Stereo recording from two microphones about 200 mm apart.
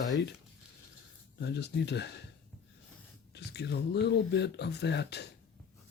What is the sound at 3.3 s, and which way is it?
Speech, 55° left (ahead or behind).